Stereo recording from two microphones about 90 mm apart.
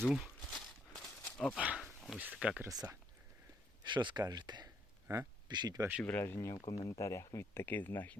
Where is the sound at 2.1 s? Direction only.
15° right (ahead or behind).